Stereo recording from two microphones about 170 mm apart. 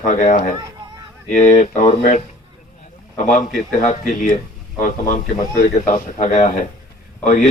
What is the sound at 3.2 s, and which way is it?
Speech, 50° left (ahead or behind).